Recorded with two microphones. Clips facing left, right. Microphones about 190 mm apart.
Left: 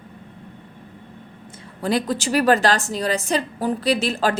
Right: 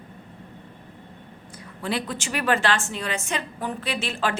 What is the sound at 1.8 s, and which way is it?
A woman's voice, 40° left (ahead or behind).